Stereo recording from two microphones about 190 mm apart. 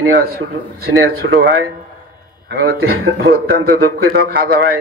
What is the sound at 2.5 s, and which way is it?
Speech, 75° right (ahead or behind).